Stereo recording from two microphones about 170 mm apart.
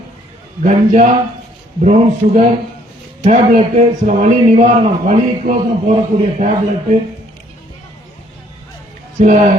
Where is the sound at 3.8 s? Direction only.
45° right (ahead or behind).